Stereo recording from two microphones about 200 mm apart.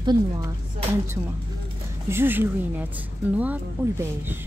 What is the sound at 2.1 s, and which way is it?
Speech, 10° right (ahead or behind).